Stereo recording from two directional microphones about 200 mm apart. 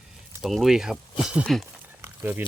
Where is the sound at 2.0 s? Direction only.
10° right (ahead or behind).